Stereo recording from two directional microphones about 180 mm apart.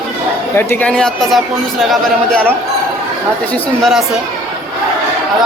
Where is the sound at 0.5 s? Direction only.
10° left (ahead or behind).